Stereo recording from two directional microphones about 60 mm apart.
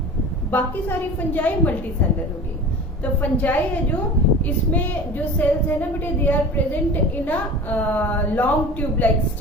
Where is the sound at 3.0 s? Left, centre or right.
Left.